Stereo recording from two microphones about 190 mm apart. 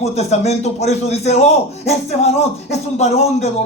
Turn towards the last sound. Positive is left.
turn(degrees=35)  # may be behind; listen again after turning